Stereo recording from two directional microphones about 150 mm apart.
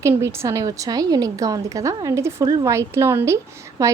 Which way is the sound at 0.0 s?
20° right (ahead or behind).